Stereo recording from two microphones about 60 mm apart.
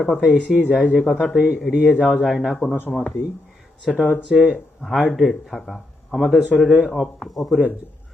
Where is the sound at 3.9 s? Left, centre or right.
Centre.